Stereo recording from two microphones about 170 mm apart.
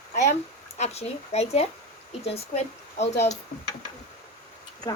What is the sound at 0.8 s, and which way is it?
Speech, 40° left (ahead or behind).